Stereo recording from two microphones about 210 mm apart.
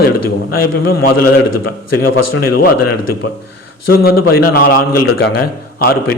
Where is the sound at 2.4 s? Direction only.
45° left (ahead or behind).